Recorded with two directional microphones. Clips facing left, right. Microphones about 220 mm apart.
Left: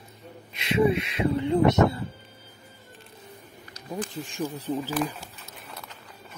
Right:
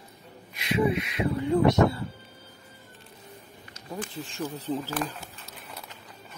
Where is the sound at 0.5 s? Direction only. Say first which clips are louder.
Left 3 dB; 25° left (ahead or behind).